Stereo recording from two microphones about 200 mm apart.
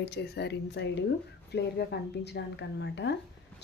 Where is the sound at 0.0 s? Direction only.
55° left (ahead or behind).